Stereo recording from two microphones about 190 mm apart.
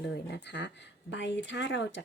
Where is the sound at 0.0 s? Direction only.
65° left (ahead or behind).